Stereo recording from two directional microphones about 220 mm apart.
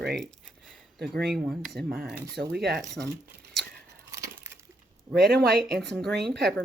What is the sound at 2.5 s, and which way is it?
Speech, 45° right (ahead or behind).